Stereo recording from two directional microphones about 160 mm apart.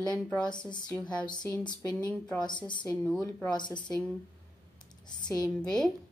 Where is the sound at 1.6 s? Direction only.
25° left (ahead or behind).